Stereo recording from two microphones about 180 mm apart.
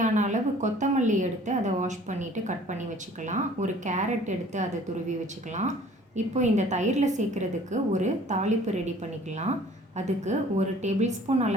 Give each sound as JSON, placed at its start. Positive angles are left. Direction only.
{"t": 0.0, "sound": "a woman's voice", "side_deg": -40}
{"t": 10.2, "sound": "a woman's voice", "side_deg": -40}